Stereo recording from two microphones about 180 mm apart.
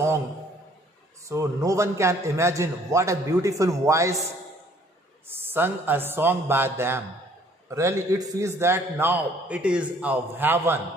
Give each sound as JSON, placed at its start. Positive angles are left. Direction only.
{"t": 1.3, "sound": "a man's voice", "side_deg": -15}
{"t": 5.3, "sound": "a man's voice", "side_deg": -10}